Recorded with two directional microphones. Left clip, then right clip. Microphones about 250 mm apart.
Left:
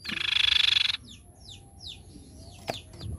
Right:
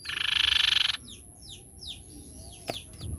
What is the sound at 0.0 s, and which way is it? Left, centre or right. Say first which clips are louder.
Frog: left 1 dB; centre.